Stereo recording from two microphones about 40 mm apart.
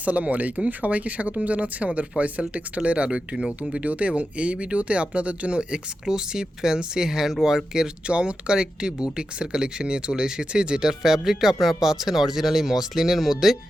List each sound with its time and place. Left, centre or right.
0.0 s speech: right; by 7.9 s centre
8.0 s speech: right; by 13.6 s centre